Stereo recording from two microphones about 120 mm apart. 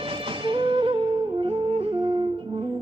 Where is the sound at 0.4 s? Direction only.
45° right (ahead or behind).